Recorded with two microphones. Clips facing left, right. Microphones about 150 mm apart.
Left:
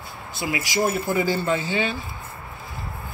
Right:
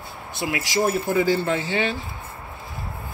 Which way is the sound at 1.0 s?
75° right (ahead or behind).